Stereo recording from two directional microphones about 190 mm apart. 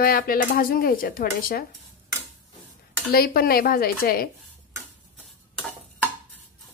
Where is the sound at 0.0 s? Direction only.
50° left (ahead or behind).